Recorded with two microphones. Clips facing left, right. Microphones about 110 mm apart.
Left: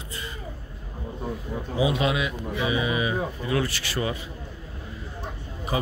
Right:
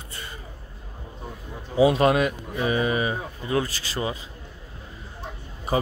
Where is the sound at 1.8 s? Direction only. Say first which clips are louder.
Right 6 dB; 50° right (ahead or behind); by 4.2 s 25° right (ahead or behind).